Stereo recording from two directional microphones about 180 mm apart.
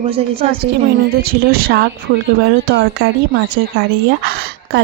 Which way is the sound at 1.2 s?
55° right (ahead or behind).